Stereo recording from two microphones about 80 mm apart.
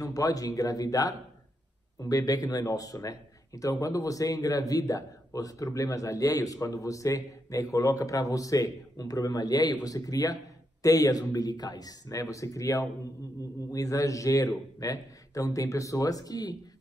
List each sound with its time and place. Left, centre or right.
0.1 s a man's voice: left